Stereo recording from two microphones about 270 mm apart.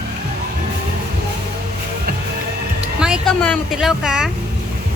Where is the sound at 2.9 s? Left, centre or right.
Centre.